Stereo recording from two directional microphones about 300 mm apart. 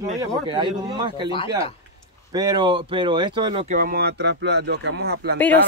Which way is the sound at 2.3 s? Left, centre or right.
Centre.